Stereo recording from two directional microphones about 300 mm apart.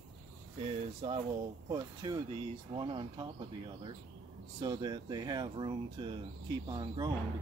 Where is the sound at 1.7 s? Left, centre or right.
Centre.